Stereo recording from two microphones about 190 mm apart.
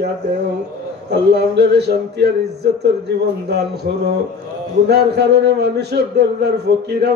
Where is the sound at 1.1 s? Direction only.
60° right (ahead or behind).